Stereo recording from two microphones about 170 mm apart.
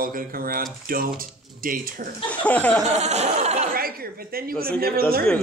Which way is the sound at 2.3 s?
10° left (ahead or behind).